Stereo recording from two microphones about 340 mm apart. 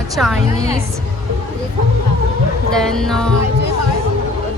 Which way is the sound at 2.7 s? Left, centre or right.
Centre.